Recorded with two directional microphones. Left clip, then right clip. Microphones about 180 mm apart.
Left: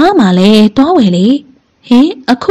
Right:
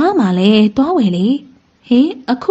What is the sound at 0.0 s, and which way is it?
A woman's voice, 30° left (ahead or behind).